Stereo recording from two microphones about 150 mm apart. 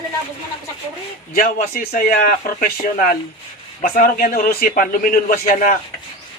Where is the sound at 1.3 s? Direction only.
70° left (ahead or behind).